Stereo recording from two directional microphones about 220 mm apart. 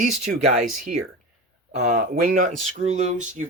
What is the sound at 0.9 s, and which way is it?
Speech, 35° right (ahead or behind).